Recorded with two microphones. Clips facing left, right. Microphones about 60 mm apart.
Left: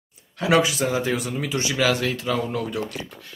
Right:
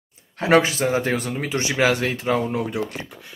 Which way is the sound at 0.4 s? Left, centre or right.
Right.